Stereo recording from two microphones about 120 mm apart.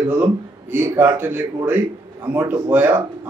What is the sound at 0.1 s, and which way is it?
A man's voice, 15° right (ahead or behind).